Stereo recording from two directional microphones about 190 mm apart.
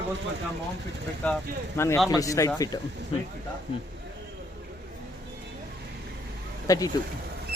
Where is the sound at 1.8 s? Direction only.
15° left (ahead or behind).